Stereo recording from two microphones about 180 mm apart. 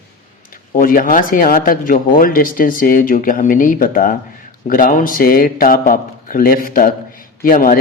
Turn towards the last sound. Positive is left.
turn(degrees=50)  # may be behind; listen again after turning